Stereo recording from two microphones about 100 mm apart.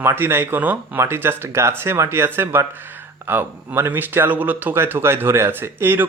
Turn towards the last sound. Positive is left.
turn(degrees=-25)  # may be behind; listen again after turning